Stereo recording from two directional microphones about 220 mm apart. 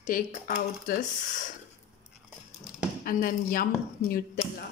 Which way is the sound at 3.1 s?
40° left (ahead or behind).